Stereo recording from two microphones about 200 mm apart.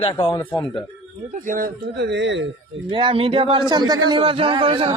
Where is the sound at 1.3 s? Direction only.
40° right (ahead or behind); by 2.5 s 65° right (ahead or behind).